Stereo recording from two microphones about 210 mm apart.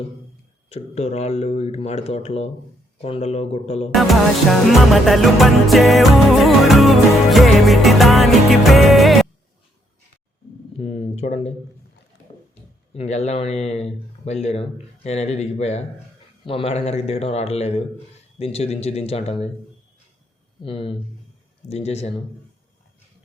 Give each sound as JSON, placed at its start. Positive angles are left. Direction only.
{"t": 0.7, "sound": "speech", "side_deg": 30}
{"t": 3.9, "sound": "music", "side_deg": 0}
{"t": 10.8, "sound": "a sound", "side_deg": 30}
{"t": 12.9, "sound": "speech", "side_deg": 30}
{"t": 20.6, "sound": "speech", "side_deg": 25}